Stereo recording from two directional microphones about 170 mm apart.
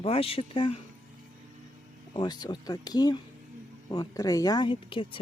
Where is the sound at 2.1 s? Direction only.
25° left (ahead or behind).